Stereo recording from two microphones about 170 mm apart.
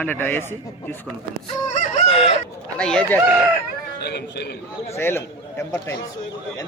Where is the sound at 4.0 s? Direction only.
75° left (ahead or behind).